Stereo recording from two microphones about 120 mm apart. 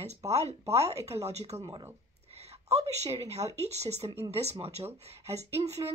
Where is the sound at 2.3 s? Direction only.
60° right (ahead or behind).